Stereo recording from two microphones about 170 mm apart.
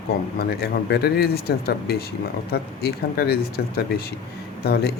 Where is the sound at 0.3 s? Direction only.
65° left (ahead or behind).